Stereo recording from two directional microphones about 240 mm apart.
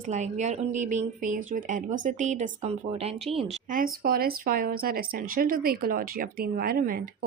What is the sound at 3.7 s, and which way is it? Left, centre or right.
A woman's voice, right.